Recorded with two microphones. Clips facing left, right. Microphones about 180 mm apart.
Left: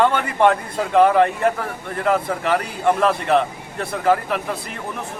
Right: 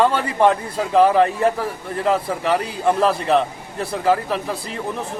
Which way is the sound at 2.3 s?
Centre (ahead or behind).